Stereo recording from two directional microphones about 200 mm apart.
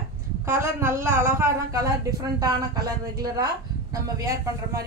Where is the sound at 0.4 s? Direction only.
10° right (ahead or behind).